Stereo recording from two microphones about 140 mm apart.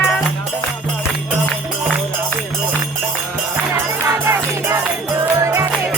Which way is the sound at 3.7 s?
20° right (ahead or behind).